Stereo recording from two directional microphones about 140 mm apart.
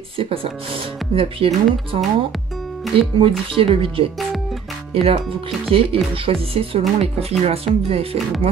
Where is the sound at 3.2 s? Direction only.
40° right (ahead or behind).